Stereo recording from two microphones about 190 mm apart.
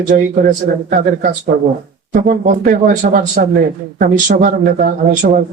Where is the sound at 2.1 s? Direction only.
50° right (ahead or behind).